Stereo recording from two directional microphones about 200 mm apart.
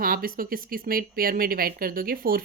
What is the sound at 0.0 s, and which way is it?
Speech, 45° right (ahead or behind).